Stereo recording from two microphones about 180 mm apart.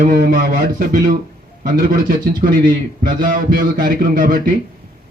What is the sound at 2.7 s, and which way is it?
A man's voice, 50° right (ahead or behind).